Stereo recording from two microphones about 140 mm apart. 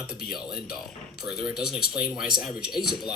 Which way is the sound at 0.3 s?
5° right (ahead or behind).